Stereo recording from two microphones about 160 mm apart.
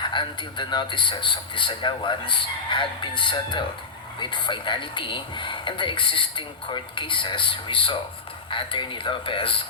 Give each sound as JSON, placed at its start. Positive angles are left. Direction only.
{"t": 0.0, "sound": "a man's voice", "side_deg": 30}